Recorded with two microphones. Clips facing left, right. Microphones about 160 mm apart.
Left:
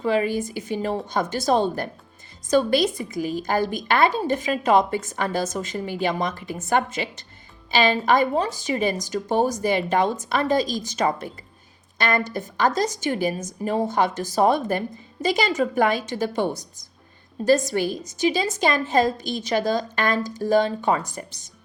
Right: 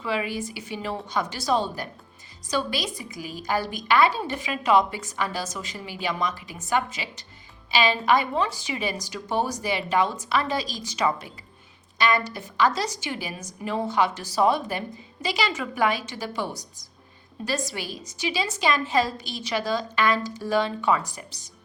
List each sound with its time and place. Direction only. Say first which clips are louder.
0.0 s a woman's voice: left 6 dB; 45° left (ahead or behind)